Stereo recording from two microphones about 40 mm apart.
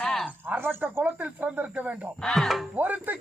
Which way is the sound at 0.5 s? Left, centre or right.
Right.